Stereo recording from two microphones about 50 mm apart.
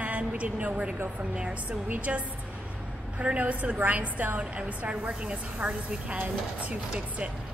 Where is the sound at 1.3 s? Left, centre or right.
Right.